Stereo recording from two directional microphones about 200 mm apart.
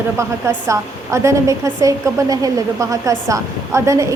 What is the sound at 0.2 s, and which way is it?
A woman's voice, 15° right (ahead or behind).